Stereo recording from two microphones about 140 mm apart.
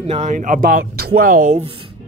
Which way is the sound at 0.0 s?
50° right (ahead or behind).